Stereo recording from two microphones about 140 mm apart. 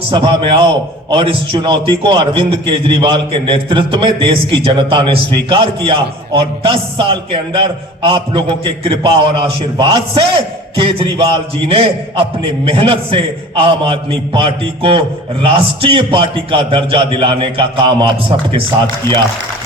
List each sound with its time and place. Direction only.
0.1 s a man's voice: 40° right (ahead or behind)